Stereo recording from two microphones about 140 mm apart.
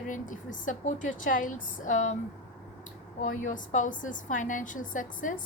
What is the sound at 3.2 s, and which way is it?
A woman's voice, 65° left (ahead or behind).